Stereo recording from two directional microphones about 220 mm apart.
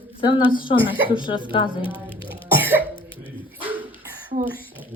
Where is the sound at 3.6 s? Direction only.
5° right (ahead or behind).